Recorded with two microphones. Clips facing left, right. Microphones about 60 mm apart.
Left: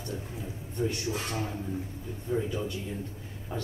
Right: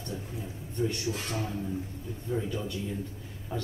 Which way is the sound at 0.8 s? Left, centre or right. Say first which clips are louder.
Even; centre.